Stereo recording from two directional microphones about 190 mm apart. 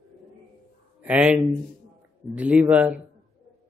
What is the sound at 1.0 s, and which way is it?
Speech, 5° right (ahead or behind).